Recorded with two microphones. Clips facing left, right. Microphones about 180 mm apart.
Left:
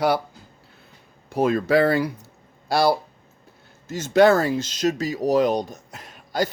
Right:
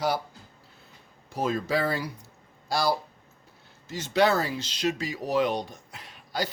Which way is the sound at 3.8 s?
45° left (ahead or behind).